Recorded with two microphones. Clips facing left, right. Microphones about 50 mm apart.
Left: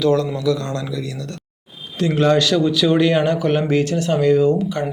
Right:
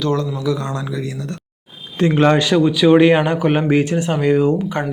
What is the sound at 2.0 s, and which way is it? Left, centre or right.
A man's voice, right.